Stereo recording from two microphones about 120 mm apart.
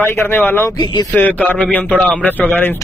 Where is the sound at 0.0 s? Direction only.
20° left (ahead or behind).